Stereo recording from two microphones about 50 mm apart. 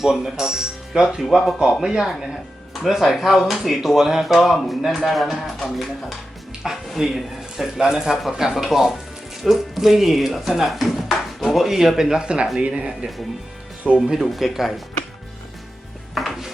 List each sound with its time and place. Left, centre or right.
0.0 s speech: centre
13.8 s speech: centre
14.2 s speech: centre
16.1 s music: centre